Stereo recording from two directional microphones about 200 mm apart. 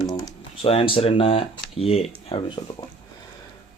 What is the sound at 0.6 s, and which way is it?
A man's voice, 30° left (ahead or behind).